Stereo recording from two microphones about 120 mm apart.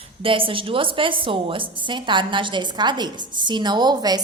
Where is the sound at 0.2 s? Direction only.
45° right (ahead or behind).